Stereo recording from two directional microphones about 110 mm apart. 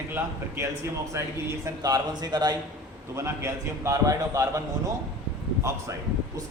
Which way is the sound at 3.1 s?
25° right (ahead or behind).